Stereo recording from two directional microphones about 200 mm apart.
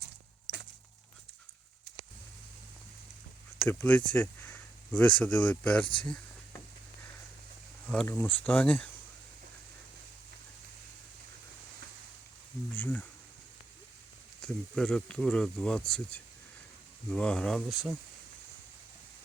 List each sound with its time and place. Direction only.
0.5 s a sound: 15° left (ahead or behind)
3.6 s speech: 10° left (ahead or behind)
5.8 s speech: 25° left (ahead or behind)
7.9 s speech: 5° left (ahead or behind)
12.7 s a sound: 5° left (ahead or behind)
14.4 s speech: 5° left (ahead or behind)